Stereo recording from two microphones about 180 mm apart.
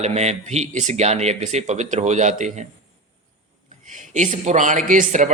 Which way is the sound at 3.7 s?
45° right (ahead or behind).